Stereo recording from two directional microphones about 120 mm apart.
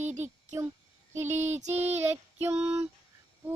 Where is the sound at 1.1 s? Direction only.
20° right (ahead or behind).